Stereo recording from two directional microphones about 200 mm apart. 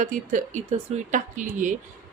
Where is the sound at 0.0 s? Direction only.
40° right (ahead or behind).